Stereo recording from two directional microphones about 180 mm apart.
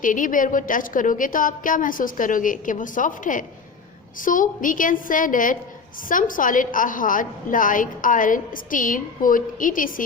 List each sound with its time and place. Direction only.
0.0 s a woman's voice: 45° left (ahead or behind)